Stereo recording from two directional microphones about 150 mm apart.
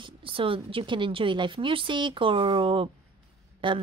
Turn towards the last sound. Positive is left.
turn(degrees=-35)  # may be behind; listen again after turning